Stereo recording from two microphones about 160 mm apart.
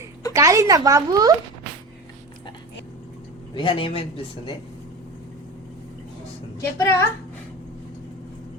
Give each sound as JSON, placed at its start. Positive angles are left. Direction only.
{"t": 0.3, "sound": "speech", "side_deg": -20}
{"t": 3.5, "sound": "a man's voice", "side_deg": 35}
{"t": 6.6, "sound": "a woman's voice", "side_deg": 15}